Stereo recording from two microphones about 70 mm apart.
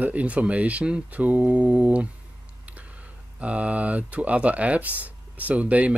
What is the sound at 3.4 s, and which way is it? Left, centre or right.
Speech, centre.